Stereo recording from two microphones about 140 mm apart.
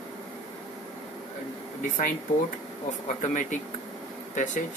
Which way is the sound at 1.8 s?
70° left (ahead or behind).